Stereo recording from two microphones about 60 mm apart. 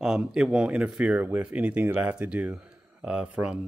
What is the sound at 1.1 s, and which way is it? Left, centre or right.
Speech, right.